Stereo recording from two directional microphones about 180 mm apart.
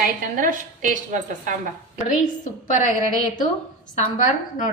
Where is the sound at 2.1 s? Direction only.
45° left (ahead or behind).